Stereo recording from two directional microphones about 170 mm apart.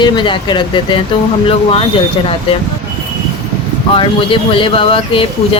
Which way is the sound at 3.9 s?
30° left (ahead or behind).